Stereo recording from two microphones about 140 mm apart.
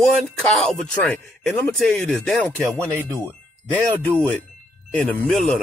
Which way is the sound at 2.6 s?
15° right (ahead or behind).